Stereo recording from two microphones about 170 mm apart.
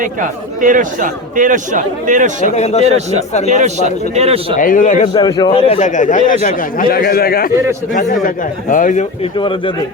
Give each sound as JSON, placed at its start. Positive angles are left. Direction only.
{"t": 0.0, "sound": "a man's voice", "side_deg": -50}
{"t": 2.6, "sound": "a man's voice", "side_deg": 40}
{"t": 3.4, "sound": "a man's voice", "side_deg": -45}
{"t": 4.5, "sound": "a man's voice", "side_deg": 50}
{"t": 5.1, "sound": "a man's voice", "side_deg": 25}
{"t": 7.9, "sound": "a man's voice", "side_deg": 50}
{"t": 9.4, "sound": "speech", "side_deg": 30}